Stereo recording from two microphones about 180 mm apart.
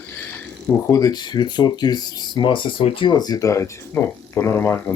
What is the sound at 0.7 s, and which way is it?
Speech, 15° left (ahead or behind).